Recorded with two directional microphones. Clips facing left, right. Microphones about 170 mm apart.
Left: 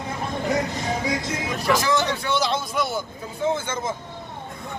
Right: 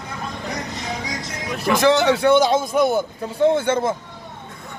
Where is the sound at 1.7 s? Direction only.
65° right (ahead or behind).